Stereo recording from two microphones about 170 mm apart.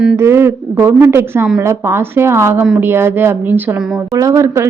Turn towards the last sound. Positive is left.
turn(degrees=-20)  # may be behind; listen again after turning